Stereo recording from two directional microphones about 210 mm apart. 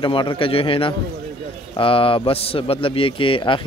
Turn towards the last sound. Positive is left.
turn(degrees=25)  # may be behind; listen again after turning